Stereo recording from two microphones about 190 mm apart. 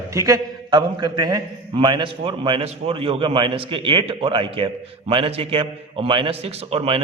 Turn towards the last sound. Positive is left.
turn(degrees=-30)  # may be behind; listen again after turning